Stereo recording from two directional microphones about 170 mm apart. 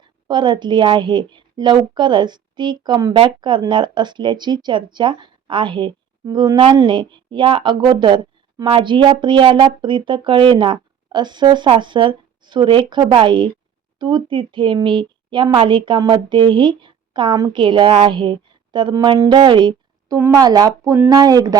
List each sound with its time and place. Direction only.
0.0 s a woman's voice: 25° right (ahead or behind)
20.1 s a woman's voice: 15° right (ahead or behind)